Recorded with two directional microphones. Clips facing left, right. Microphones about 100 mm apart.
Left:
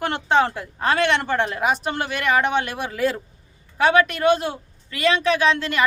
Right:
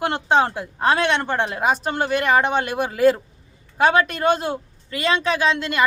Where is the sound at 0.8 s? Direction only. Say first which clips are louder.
Right 1 dB; 35° right (ahead or behind).